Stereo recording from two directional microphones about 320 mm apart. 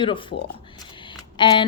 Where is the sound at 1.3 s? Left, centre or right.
Centre.